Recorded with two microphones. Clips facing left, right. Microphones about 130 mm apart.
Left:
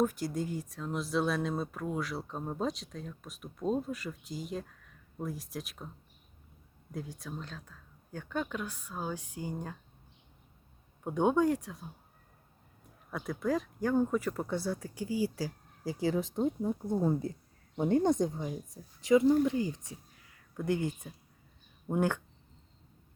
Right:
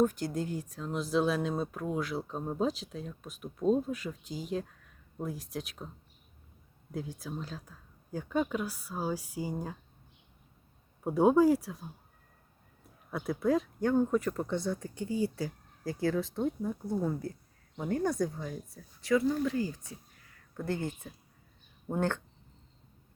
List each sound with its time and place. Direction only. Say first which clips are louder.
0.0 s speech: right 2 dB; 5° left (ahead or behind)
6.9 s speech: right 3 dB; centre (ahead or behind)
11.0 s speech: right 4 dB; 5° right (ahead or behind)
13.1 s a woman's voice: right 3 dB; 5° right (ahead or behind); by 22.2 s 10° left (ahead or behind)